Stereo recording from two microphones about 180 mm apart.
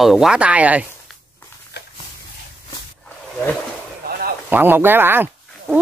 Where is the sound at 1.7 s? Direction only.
65° left (ahead or behind).